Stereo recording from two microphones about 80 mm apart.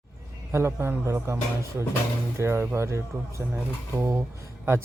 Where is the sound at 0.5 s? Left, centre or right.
Right.